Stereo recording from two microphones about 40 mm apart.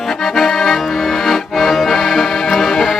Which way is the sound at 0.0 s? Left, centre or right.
Centre.